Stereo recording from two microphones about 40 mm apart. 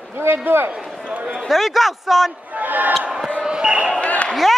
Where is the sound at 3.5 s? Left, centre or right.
Right.